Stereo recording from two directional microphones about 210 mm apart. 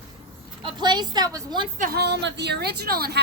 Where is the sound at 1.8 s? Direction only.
45° right (ahead or behind).